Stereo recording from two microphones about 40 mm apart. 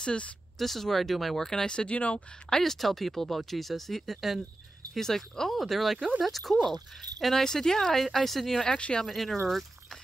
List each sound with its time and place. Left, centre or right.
0.0 s speech: left
0.6 s speech: centre; by 2.0 s left
2.0 s speech: left
2.5 s speech: centre
7.4 s speech: centre
8.6 s speech: left
9.1 s speech: centre